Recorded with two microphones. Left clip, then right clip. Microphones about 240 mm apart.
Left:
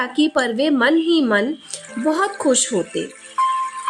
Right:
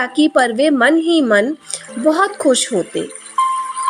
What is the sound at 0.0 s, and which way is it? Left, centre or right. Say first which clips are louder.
A woman's voice: right 5 dB; centre.